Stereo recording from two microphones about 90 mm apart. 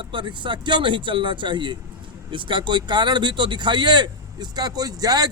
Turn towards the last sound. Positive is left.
turn(degrees=-45)  # may be behind; listen again after turning